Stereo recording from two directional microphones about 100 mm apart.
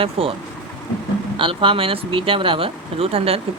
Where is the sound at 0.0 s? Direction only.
70° right (ahead or behind).